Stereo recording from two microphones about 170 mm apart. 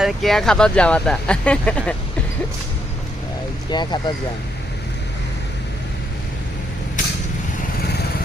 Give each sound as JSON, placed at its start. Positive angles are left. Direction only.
{"t": 0.0, "sound": "speech", "side_deg": 0}
{"t": 3.7, "sound": "speech", "side_deg": 25}